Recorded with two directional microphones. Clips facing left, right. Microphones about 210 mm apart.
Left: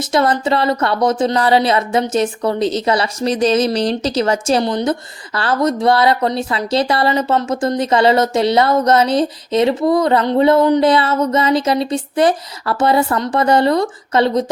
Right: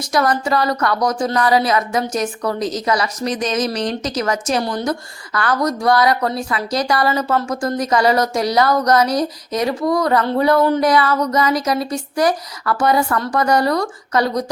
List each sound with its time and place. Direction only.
0.1 s speech: 25° left (ahead or behind)